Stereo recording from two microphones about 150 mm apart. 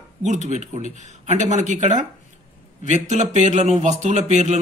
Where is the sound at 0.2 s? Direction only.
50° right (ahead or behind).